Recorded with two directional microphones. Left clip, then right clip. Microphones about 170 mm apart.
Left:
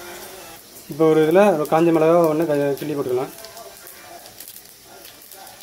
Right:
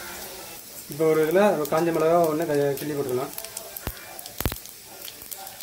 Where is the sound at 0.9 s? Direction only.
35° left (ahead or behind).